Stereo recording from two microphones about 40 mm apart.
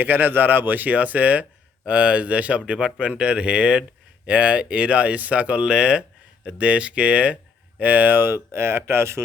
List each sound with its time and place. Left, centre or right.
0.0 s speech: right
0.9 s speech: right
5.6 s speech: right
7.8 s speech: right
8.1 s speech: right